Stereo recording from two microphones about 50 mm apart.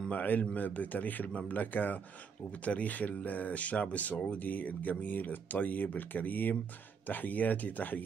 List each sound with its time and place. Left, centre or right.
0.1 s speech: left